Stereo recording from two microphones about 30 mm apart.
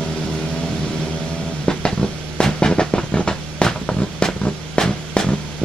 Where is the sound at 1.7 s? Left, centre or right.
Left.